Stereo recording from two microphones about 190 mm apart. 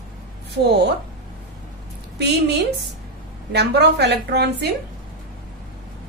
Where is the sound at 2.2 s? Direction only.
60° right (ahead or behind).